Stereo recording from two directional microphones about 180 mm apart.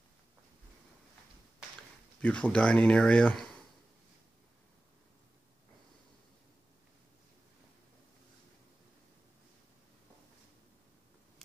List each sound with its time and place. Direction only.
2.2 s speech: 5° left (ahead or behind)